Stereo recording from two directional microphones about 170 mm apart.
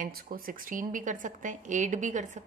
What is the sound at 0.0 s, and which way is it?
A woman's voice, 55° right (ahead or behind).